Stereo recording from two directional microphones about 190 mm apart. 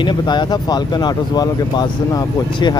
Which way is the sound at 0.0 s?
25° left (ahead or behind).